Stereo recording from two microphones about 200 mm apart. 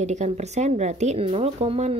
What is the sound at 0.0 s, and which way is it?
Speech, 35° right (ahead or behind).